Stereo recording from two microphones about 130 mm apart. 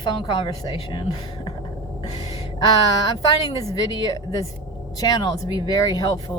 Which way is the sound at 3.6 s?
30° left (ahead or behind).